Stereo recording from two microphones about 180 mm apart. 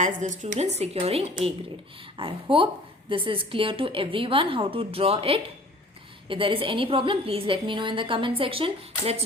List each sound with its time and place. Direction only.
0.0 s a woman's voice: 40° right (ahead or behind)